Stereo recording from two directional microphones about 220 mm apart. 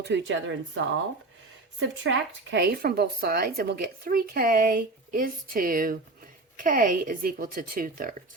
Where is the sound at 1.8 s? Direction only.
55° right (ahead or behind); by 8.1 s 40° right (ahead or behind).